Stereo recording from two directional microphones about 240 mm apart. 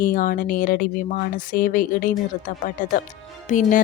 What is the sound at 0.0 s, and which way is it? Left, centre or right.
A woman's voice, left.